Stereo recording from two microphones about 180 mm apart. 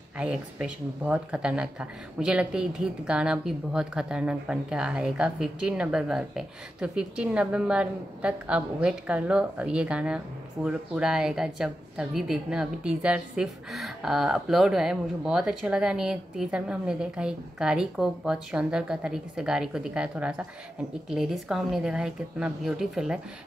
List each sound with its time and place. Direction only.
0.2 s speech: 5° right (ahead or behind)